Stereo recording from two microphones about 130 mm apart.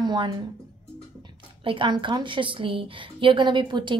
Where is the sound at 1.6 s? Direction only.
40° right (ahead or behind).